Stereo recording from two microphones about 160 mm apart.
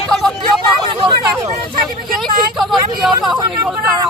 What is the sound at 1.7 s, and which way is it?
Vehicle, 60° right (ahead or behind).